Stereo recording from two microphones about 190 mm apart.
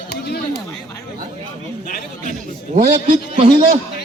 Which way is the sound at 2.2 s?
45° right (ahead or behind).